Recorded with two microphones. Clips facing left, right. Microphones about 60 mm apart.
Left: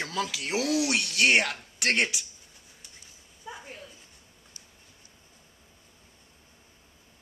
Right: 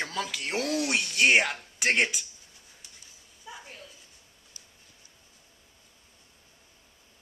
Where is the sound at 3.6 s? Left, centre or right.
Centre.